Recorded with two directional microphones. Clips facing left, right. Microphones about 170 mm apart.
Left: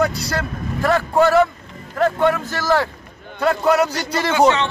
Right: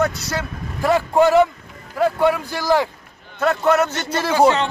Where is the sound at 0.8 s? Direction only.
15° right (ahead or behind).